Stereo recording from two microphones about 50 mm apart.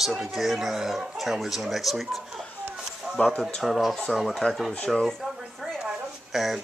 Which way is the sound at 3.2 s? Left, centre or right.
Left.